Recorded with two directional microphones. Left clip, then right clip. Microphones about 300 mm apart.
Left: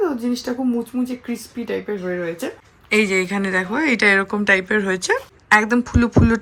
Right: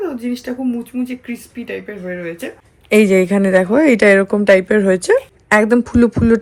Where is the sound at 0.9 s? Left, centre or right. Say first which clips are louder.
Right 1 dB; centre.